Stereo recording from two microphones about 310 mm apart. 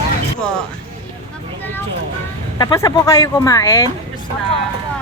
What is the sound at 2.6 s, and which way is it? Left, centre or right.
Speech, centre.